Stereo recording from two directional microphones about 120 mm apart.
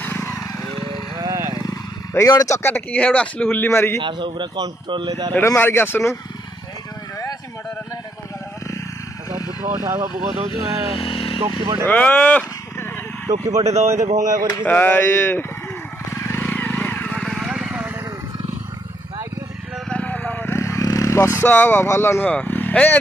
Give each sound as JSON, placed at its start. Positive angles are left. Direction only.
{"t": 0.0, "sound": "vehicle", "side_deg": 20}
{"t": 1.2, "sound": "vehicle", "side_deg": -25}
{"t": 1.6, "sound": "speech", "side_deg": 30}
{"t": 4.0, "sound": "speech", "side_deg": -40}
{"t": 5.3, "sound": "speech", "side_deg": 20}
{"t": 9.8, "sound": "speech", "side_deg": -35}
{"t": 10.5, "sound": "speech", "side_deg": 50}
{"t": 11.4, "sound": "speech", "side_deg": -50}
{"t": 11.8, "sound": "a sound", "side_deg": 10}
{"t": 13.3, "sound": "speech", "side_deg": -70}
{"t": 14.6, "sound": "speech", "side_deg": 15}
{"t": 16.1, "sound": "vehicle", "side_deg": 20}
{"t": 19.9, "sound": "vehicle", "side_deg": 10}
{"t": 22.3, "sound": "speech", "side_deg": 15}